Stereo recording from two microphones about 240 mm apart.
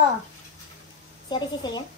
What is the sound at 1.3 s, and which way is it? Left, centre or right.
Speech, centre.